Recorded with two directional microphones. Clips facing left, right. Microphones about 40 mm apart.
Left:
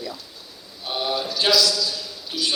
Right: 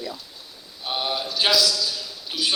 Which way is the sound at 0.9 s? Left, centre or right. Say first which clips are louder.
Left 1 dB; centre.